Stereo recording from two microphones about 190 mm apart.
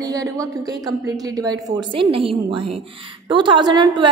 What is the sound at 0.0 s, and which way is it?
A woman's voice, 20° right (ahead or behind).